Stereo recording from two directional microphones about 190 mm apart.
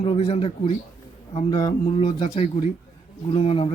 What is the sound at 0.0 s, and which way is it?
Speech, 25° left (ahead or behind).